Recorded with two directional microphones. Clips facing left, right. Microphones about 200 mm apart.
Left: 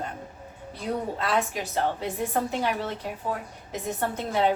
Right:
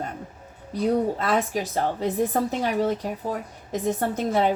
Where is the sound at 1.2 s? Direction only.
40° right (ahead or behind).